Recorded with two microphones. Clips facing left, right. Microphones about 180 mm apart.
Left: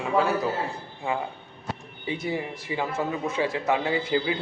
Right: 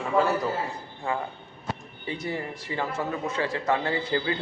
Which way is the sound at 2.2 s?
10° left (ahead or behind).